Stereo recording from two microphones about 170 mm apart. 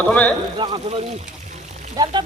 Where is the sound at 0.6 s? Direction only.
25° right (ahead or behind).